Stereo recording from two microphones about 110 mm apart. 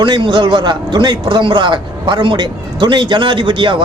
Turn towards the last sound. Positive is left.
turn(degrees=-45)  # may be behind; listen again after turning